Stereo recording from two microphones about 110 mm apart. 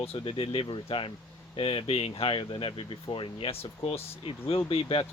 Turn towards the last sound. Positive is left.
turn(degrees=55)  # may be behind; listen again after turning